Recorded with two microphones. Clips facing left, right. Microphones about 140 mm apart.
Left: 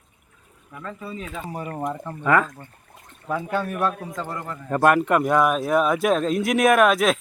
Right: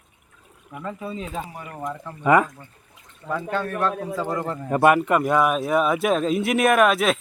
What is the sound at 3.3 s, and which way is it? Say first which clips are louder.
Speech: even; 10° left (ahead or behind).